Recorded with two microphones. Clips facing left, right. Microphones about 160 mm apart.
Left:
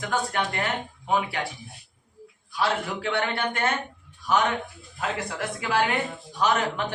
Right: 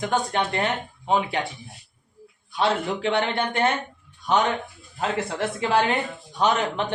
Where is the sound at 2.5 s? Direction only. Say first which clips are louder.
Right 3 dB; 25° right (ahead or behind).